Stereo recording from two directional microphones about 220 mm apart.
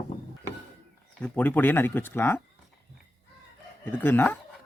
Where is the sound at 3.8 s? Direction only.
10° left (ahead or behind).